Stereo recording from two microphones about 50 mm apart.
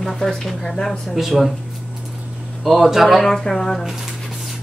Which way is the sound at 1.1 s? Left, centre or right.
Centre.